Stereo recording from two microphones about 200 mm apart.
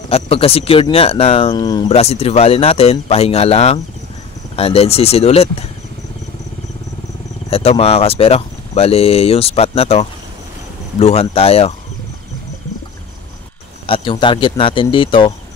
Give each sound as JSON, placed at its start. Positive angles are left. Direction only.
{"t": 0.1, "sound": "speech", "side_deg": 30}
{"t": 1.9, "sound": "speech", "side_deg": 30}
{"t": 7.4, "sound": "speech", "side_deg": 30}
{"t": 13.8, "sound": "speech", "side_deg": 25}